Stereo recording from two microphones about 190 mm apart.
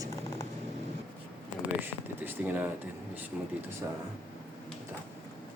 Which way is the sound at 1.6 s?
10° right (ahead or behind).